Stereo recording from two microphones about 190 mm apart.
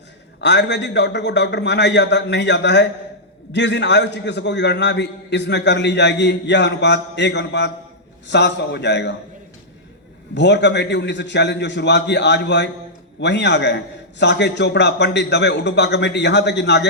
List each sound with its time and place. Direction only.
0.4 s a man's voice: 65° left (ahead or behind)
10.3 s a man's voice: 65° left (ahead or behind)